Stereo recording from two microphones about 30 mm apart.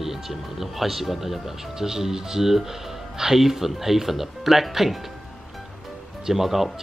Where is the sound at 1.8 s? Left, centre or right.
Centre.